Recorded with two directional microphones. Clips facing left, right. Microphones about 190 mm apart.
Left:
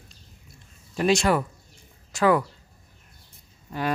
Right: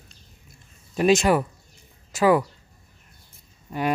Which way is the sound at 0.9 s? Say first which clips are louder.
Right 3 dB; 15° right (ahead or behind).